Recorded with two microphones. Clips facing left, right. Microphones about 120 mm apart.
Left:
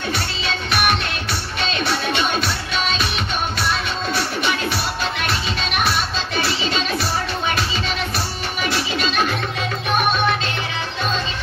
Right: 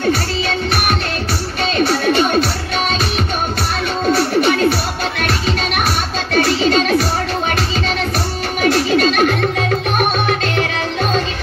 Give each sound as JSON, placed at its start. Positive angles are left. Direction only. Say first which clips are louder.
{"t": 1.6, "sound": "music", "louder": "right 7 dB", "side_deg": -40}
{"t": 4.1, "sound": "music", "louder": "right 9 dB", "side_deg": -40}
{"t": 5.9, "sound": "music", "louder": "right 3 dB", "side_deg": -50}
{"t": 8.6, "sound": "music", "louder": "right 10 dB", "side_deg": -45}